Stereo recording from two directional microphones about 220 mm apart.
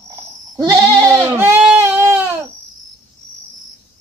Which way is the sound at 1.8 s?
10° right (ahead or behind).